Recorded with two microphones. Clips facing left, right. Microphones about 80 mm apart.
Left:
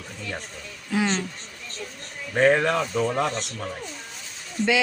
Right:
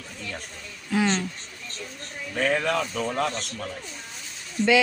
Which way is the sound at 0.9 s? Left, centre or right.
Centre.